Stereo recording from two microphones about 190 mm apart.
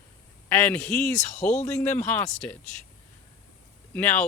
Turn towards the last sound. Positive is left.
turn(degrees=10)  # may be behind; listen again after turning